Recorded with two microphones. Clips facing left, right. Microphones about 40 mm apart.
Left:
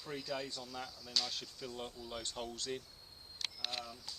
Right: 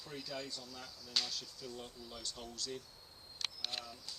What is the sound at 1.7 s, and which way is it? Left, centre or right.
Speech, left.